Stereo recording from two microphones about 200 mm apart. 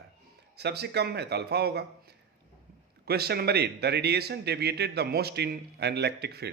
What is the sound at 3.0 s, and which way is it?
A man's voice, 50° right (ahead or behind).